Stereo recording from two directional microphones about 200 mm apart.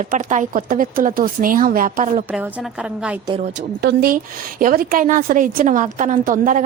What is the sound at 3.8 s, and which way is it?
A woman's voice, 55° right (ahead or behind).